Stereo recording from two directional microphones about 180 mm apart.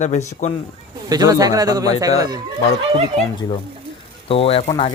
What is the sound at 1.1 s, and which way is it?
A man's voice, 20° right (ahead or behind).